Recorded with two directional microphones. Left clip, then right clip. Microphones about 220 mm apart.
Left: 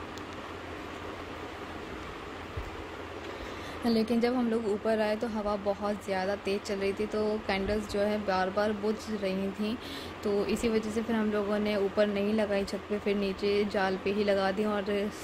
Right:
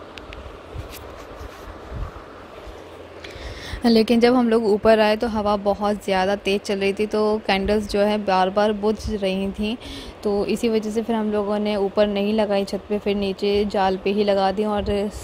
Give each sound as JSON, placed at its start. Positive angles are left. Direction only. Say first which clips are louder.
{"t": 3.8, "sound": "speech", "louder": "right 12 dB", "side_deg": -45}